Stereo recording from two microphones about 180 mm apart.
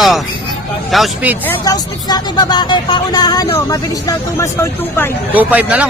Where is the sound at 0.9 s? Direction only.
Centre (ahead or behind).